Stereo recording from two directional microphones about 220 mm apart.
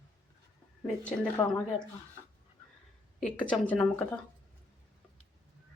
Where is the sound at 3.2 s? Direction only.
5° left (ahead or behind).